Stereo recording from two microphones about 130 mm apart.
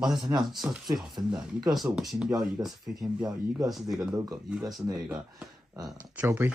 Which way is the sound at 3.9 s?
25° right (ahead or behind).